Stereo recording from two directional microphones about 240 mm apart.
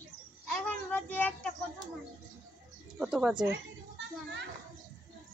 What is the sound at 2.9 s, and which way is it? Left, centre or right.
Speech, centre.